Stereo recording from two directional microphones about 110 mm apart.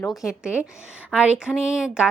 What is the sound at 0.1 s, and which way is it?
Speech, centre (ahead or behind).